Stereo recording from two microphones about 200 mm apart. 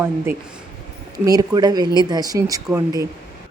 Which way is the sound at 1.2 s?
20° right (ahead or behind).